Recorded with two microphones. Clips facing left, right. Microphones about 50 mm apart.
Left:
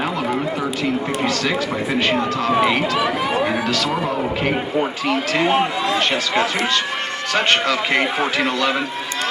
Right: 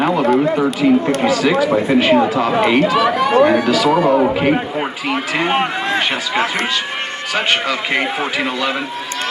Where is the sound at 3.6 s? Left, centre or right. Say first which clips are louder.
Right 6 dB; centre.